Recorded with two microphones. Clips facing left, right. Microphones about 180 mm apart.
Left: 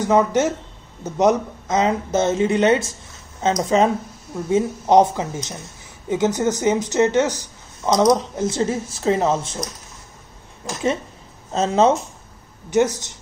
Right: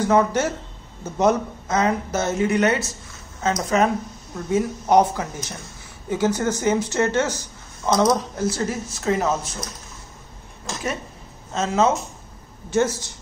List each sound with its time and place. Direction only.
0.0 s speech: 20° left (ahead or behind)
11.5 s speech: 30° left (ahead or behind)
12.6 s speech: 20° left (ahead or behind)